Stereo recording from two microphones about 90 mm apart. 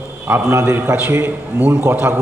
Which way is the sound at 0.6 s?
25° right (ahead or behind).